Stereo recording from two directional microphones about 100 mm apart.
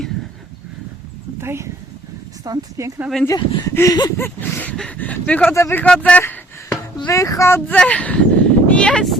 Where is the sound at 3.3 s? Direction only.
30° left (ahead or behind).